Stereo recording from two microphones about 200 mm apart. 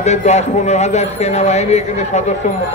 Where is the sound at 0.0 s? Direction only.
35° left (ahead or behind).